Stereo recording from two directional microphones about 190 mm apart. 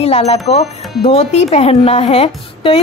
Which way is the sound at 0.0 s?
30° left (ahead or behind).